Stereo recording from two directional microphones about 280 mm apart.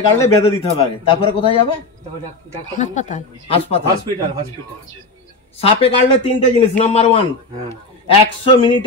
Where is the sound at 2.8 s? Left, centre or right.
Left.